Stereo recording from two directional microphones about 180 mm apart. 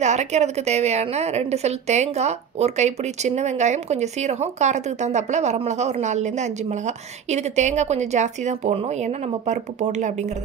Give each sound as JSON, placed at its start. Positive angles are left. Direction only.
{"t": 0.0, "sound": "a woman's voice", "side_deg": -40}